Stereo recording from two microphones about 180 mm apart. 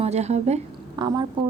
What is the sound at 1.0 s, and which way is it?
Speech, 20° right (ahead or behind).